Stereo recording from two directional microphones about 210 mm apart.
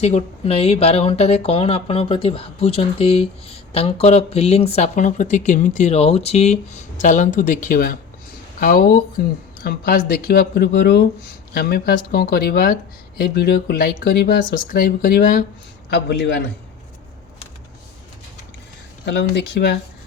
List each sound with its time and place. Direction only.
0.0 s speech: 30° left (ahead or behind)
15.9 s speech: 50° left (ahead or behind)
19.0 s speech: 55° left (ahead or behind)